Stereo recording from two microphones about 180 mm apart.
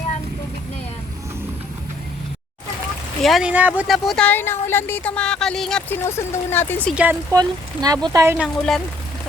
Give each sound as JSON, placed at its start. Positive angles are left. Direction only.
{"t": 3.2, "sound": "speech", "side_deg": -5}
{"t": 6.1, "sound": "speech", "side_deg": 15}
{"t": 6.9, "sound": "speech", "side_deg": -10}
{"t": 7.3, "sound": "speech", "side_deg": -20}
{"t": 8.4, "sound": "speech", "side_deg": 0}